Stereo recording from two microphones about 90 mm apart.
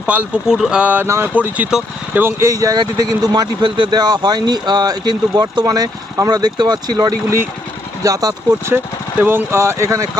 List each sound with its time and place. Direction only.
0.0 s speech: 10° right (ahead or behind)
1.0 s speech: 30° right (ahead or behind)
1.3 s speech: 15° right (ahead or behind)
2.5 s speech: 40° right (ahead or behind)
3.6 s speech: 55° right (ahead or behind)
8.0 s speech: 40° right (ahead or behind)
9.2 s speech: 25° right (ahead or behind)